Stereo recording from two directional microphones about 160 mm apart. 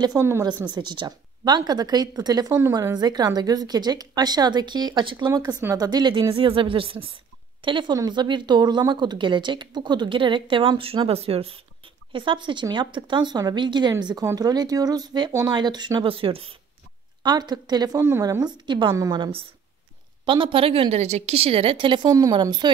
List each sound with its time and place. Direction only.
0.0 s a woman's voice: 20° right (ahead or behind)